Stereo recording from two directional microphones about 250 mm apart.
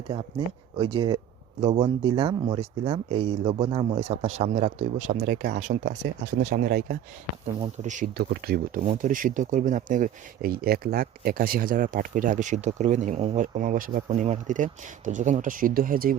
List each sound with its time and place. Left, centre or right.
0.1 s speech: centre; by 16.1 s right